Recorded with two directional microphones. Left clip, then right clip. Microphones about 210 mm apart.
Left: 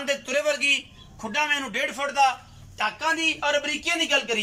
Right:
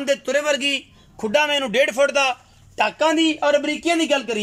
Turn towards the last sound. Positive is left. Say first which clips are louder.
# right 3 dB
turn(degrees=-35)  # may be behind; listen again after turning